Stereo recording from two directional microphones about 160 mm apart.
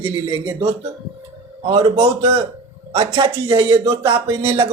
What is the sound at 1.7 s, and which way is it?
A man's voice, 30° right (ahead or behind).